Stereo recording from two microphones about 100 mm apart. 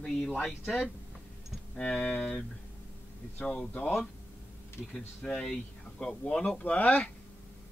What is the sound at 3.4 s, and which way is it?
Speech, 10° left (ahead or behind).